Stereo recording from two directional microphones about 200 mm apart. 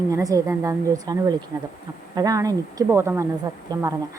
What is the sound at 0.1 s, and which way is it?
Speech, 15° right (ahead or behind).